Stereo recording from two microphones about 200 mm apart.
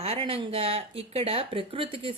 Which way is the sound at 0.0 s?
30° right (ahead or behind).